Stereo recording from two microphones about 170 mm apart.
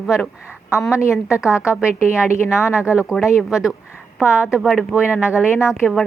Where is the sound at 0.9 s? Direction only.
15° left (ahead or behind).